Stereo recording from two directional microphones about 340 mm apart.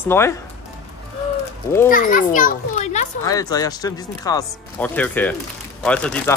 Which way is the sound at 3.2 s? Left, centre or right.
Centre.